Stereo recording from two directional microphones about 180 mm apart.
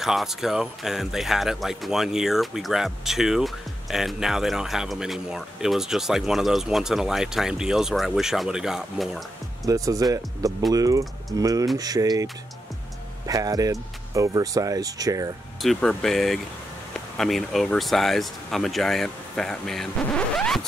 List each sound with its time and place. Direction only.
0.0 s speech: centre (ahead or behind)
9.7 s speech: 20° right (ahead or behind)
13.3 s speech: 20° right (ahead or behind)
15.6 s speech: centre (ahead or behind)